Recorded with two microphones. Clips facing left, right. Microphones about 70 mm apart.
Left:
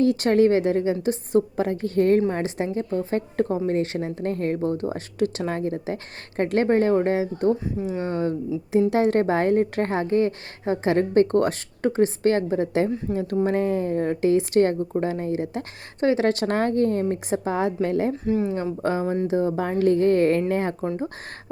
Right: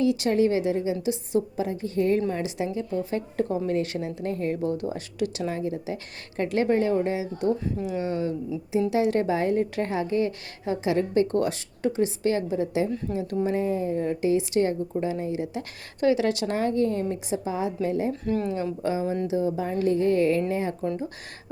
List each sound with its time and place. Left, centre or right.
0.0 s a woman's voice: left
18.1 s speech: centre
18.8 s a woman's voice: left